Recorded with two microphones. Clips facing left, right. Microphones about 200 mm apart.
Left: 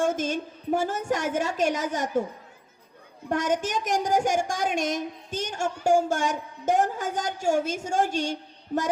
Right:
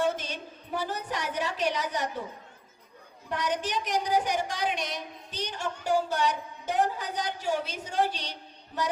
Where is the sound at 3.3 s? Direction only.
45° left (ahead or behind).